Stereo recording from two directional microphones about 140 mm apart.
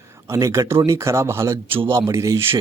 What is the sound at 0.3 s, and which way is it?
A man's voice, 20° right (ahead or behind).